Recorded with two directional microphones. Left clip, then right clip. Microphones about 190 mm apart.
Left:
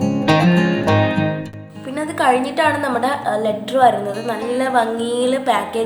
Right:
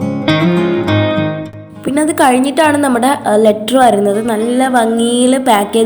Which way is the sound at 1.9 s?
40° right (ahead or behind).